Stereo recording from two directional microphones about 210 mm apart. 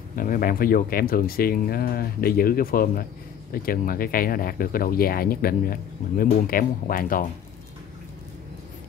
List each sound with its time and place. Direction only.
0.1 s speech: 40° left (ahead or behind)